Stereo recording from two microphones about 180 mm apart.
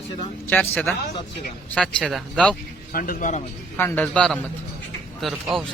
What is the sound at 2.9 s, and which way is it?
Speech, 55° left (ahead or behind).